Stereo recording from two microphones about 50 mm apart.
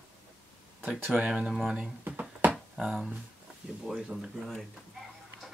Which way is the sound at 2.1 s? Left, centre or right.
Right.